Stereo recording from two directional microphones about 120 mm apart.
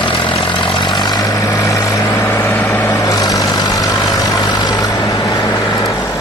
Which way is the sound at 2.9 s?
30° left (ahead or behind).